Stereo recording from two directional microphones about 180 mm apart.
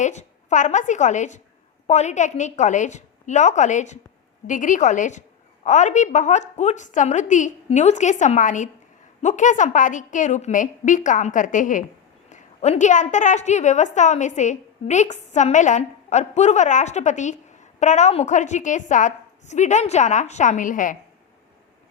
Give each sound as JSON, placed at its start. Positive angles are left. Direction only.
{"t": 0.0, "sound": "a woman's voice", "side_deg": 40}